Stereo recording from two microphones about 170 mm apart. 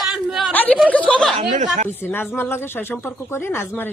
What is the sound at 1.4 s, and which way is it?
Speech, 45° right (ahead or behind).